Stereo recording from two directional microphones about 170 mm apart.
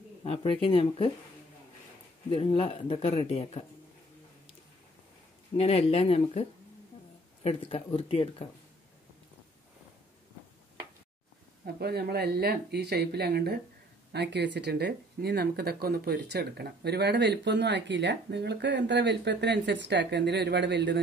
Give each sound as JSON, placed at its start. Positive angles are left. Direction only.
{"t": 0.2, "sound": "speech", "side_deg": 30}
{"t": 2.3, "sound": "speech", "side_deg": 35}
{"t": 5.6, "sound": "speech", "side_deg": 35}
{"t": 7.4, "sound": "speech", "side_deg": 35}
{"t": 11.6, "sound": "speech", "side_deg": -70}
{"t": 14.1, "sound": "speech", "side_deg": -80}